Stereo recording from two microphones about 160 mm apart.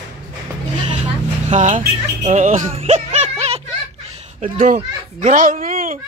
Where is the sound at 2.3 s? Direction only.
45° right (ahead or behind).